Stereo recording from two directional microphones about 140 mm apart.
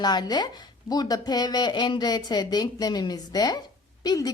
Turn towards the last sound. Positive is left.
turn(degrees=30)  # may be behind; listen again after turning